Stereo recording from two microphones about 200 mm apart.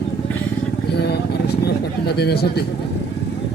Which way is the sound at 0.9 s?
55° left (ahead or behind).